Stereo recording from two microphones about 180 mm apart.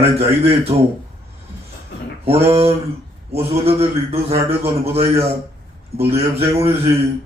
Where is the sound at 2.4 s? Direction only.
35° right (ahead or behind).